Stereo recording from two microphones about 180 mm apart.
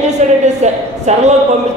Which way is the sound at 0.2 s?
40° right (ahead or behind).